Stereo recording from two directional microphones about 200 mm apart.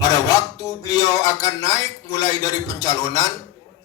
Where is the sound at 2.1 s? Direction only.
15° left (ahead or behind).